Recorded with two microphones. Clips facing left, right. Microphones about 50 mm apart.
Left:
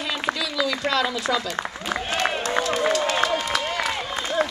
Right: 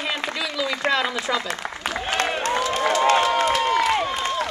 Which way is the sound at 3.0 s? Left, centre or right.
Right.